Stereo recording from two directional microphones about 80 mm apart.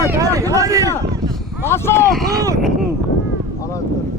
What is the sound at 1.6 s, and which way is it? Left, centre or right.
Speech, left.